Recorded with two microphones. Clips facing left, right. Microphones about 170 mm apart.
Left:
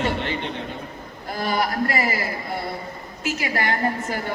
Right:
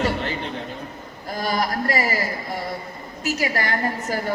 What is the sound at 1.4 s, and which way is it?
Speech, 40° right (ahead or behind).